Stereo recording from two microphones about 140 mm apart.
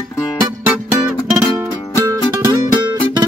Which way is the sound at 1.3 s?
5° right (ahead or behind).